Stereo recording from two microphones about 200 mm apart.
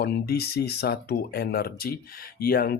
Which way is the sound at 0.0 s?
50° left (ahead or behind).